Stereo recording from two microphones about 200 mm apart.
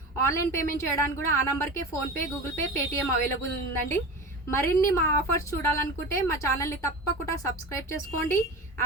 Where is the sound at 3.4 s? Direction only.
10° left (ahead or behind).